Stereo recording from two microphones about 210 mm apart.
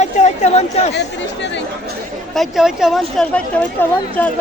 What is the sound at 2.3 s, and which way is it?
Speech, centre (ahead or behind).